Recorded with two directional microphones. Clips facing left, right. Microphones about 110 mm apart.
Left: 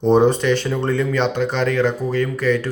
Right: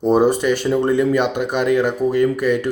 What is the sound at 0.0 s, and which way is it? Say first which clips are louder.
Speech: even; 5° right (ahead or behind).